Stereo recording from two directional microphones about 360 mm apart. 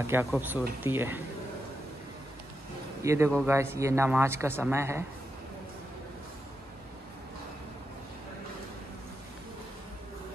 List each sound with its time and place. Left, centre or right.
0.0 s speech: centre
3.0 s a man's voice: centre